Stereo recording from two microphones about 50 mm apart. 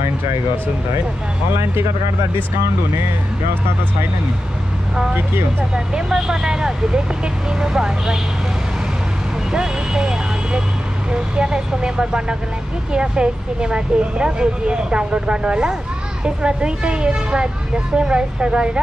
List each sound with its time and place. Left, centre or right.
5.9 s speech: centre
9.5 s a woman's voice: centre